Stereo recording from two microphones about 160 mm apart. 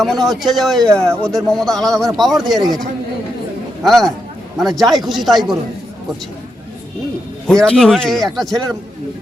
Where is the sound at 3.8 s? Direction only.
Centre (ahead or behind).